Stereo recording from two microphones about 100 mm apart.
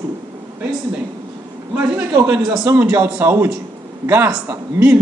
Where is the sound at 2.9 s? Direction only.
20° right (ahead or behind).